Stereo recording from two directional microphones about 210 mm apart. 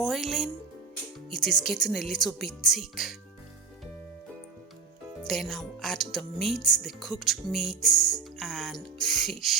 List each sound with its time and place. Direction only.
0.0 s music: centre (ahead or behind)
1.3 s speech: centre (ahead or behind)
5.2 s speech: centre (ahead or behind)